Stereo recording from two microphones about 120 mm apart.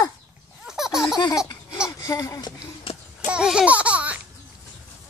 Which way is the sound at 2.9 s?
50° left (ahead or behind).